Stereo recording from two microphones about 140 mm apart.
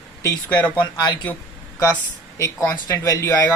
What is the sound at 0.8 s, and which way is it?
Speech, 35° left (ahead or behind).